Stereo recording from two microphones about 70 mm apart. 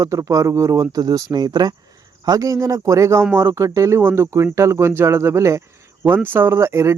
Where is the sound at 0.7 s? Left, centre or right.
Right.